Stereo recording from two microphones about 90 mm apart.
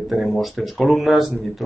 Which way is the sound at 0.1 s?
Centre (ahead or behind).